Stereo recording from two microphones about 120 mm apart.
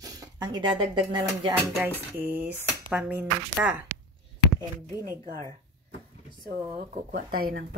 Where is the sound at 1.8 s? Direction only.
15° right (ahead or behind).